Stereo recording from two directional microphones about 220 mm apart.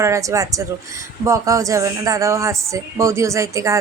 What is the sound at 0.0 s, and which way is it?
A woman's voice, 15° right (ahead or behind).